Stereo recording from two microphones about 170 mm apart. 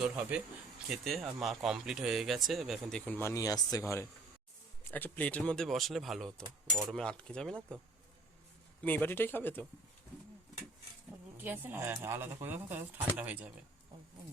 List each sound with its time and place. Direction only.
0.0 s speech: 5° right (ahead or behind)
3.1 s speech: 15° left (ahead or behind)
8.8 s speech: 10° left (ahead or behind)
11.3 s speech: 10° right (ahead or behind)